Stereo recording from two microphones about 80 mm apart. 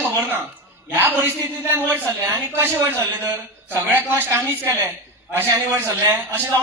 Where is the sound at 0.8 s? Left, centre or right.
Right.